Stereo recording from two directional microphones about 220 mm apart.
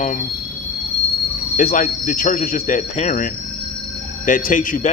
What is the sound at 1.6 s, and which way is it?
A man's voice, 35° left (ahead or behind).